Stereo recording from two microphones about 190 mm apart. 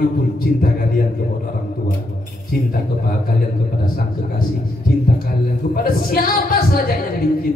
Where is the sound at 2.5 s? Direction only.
50° left (ahead or behind).